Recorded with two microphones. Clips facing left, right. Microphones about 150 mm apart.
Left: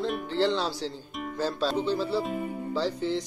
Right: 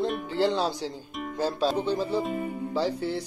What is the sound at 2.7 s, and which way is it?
Speech, 10° right (ahead or behind).